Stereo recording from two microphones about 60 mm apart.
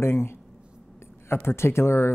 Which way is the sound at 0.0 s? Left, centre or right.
Left.